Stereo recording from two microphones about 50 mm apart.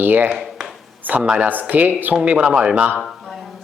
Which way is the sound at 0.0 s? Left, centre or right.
Right.